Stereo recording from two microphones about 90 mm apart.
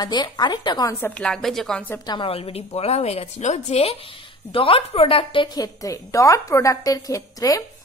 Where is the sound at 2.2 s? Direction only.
90° left.